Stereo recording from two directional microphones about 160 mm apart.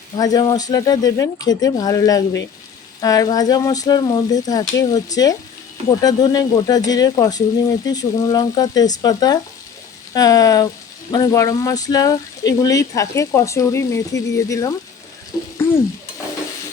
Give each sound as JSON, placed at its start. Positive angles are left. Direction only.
{"t": 0.2, "sound": "speech", "side_deg": 25}